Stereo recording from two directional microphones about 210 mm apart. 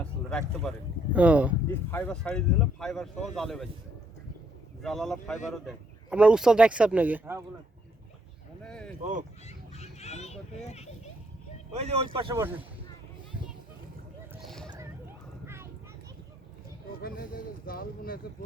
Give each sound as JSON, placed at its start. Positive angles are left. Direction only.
{"t": 0.0, "sound": "a sound", "side_deg": 5}
{"t": 1.1, "sound": "speech", "side_deg": -5}
{"t": 1.7, "sound": "speech", "side_deg": 10}
{"t": 4.8, "sound": "speech", "side_deg": 0}
{"t": 8.6, "sound": "speech", "side_deg": 5}
{"t": 9.5, "sound": "children playing", "side_deg": 30}
{"t": 11.7, "sound": "speech", "side_deg": -30}
{"t": 12.3, "sound": "speech", "side_deg": -15}
{"t": 14.4, "sound": "a sound", "side_deg": 0}
{"t": 15.4, "sound": "a sound", "side_deg": -10}
{"t": 17.0, "sound": "speech", "side_deg": 45}